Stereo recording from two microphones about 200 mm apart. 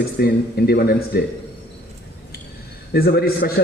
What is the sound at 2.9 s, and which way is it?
Speech, 50° left (ahead or behind).